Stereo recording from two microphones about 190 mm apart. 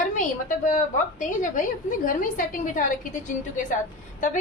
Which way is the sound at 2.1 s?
45° left (ahead or behind).